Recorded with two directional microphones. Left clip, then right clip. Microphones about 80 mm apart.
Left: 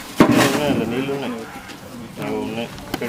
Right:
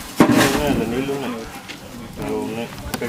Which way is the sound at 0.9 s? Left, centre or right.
Centre.